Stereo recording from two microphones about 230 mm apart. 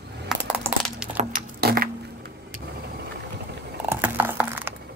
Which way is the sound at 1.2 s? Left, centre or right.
Right.